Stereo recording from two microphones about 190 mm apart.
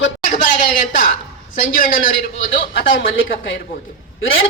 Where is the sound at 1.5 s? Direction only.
45° left (ahead or behind).